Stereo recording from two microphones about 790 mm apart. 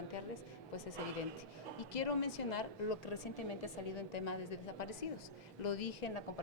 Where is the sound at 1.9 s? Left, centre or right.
Left.